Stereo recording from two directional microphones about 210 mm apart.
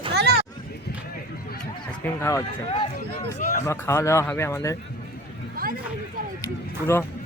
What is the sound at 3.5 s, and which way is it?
A man's voice, 10° left (ahead or behind).